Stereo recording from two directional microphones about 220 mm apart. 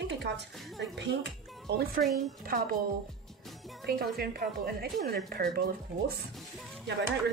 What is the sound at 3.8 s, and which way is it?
A woman's voice, 45° right (ahead or behind).